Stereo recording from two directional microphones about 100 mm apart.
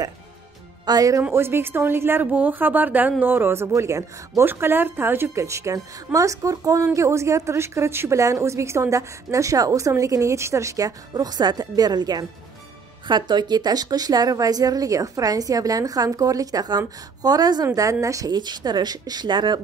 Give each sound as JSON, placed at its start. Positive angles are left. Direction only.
{"t": 0.8, "sound": "a woman's voice", "side_deg": -40}
{"t": 1.3, "sound": "a woman's voice", "side_deg": -25}